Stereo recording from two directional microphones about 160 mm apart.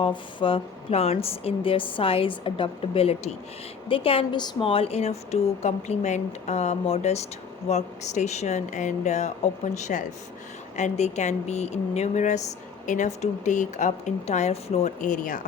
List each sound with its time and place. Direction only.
0.0 s a woman's voice: 30° left (ahead or behind); by 15.4 s 55° left (ahead or behind)